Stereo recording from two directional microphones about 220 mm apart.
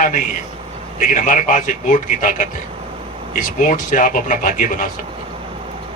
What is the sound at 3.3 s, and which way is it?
A man's voice, 35° left (ahead or behind).